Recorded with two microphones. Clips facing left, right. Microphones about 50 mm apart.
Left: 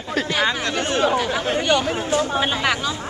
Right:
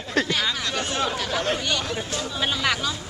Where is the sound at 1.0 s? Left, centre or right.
Centre.